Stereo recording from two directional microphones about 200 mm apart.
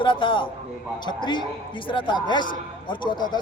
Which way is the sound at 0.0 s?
25° left (ahead or behind).